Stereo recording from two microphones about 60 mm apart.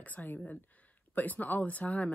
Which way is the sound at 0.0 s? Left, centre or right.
Left.